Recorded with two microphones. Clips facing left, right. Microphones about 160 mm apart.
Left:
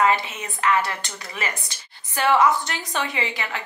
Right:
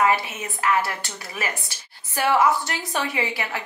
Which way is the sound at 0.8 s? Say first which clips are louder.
Even; 20° left (ahead or behind).